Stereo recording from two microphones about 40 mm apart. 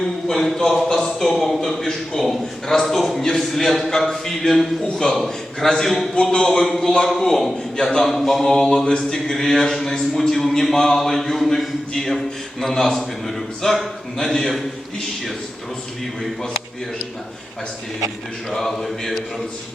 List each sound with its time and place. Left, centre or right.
0.3 s mantra: centre
0.9 s a man's voice: centre
3.2 s mantra: centre
3.4 s a man's voice: centre
3.9 s mantra: centre
7.8 s mantra: centre
8.0 s mantra: centre
18.5 s mantra: centre